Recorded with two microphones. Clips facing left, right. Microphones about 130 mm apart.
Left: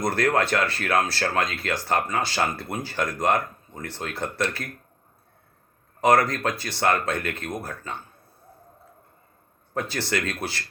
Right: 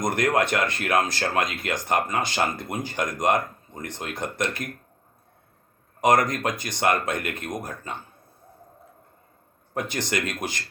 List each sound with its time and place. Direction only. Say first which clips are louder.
0.0 s speech: even; 15° right (ahead or behind)
6.0 s speech: left 1 dB; 15° right (ahead or behind)
9.7 s speech: even; 20° right (ahead or behind)